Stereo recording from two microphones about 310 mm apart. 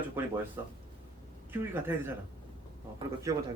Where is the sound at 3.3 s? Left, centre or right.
Centre.